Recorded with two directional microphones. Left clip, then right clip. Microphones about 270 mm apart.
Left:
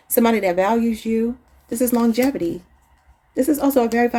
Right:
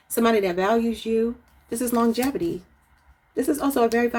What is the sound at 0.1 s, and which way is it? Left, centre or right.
Speech, left.